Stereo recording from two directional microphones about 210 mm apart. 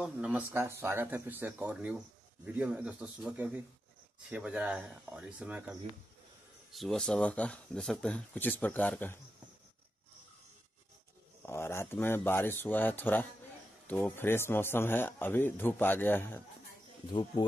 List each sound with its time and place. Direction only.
0.0 s speech: 5° right (ahead or behind)
11.4 s a man's voice: 10° left (ahead or behind)
17.1 s speech: 20° left (ahead or behind)